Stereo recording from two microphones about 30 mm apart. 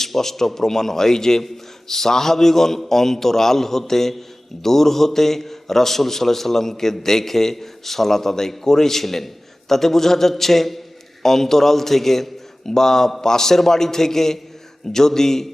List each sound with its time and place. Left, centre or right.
0.0 s a man's voice: centre